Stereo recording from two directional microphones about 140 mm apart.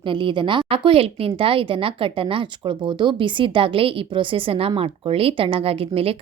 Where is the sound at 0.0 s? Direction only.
35° right (ahead or behind).